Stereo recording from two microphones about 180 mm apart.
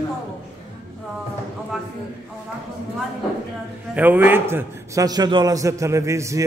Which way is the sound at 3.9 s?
10° right (ahead or behind).